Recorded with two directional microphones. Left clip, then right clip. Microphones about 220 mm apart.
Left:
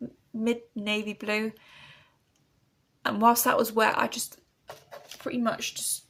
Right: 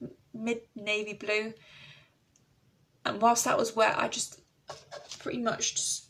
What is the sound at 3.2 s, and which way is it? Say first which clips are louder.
Speech: left 3 dB; 45° left (ahead or behind).